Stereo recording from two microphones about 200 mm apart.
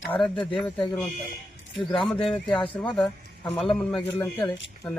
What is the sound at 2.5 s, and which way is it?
Speech, 25° left (ahead or behind).